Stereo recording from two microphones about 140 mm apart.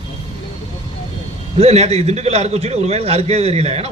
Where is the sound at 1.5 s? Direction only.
50° right (ahead or behind).